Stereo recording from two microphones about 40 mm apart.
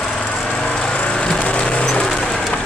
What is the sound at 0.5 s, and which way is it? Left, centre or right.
Lawn mower, centre.